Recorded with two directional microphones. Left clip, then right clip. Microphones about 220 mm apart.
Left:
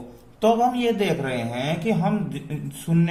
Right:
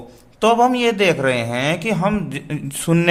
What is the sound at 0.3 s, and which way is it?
Speech, 45° right (ahead or behind).